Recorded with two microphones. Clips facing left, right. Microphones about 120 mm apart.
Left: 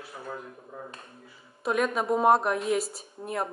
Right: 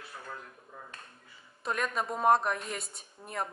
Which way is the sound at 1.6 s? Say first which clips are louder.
Left 6 dB; 5° left (ahead or behind).